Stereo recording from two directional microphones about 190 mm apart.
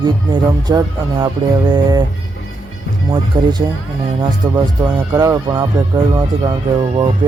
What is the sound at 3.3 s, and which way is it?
Speech, 25° right (ahead or behind).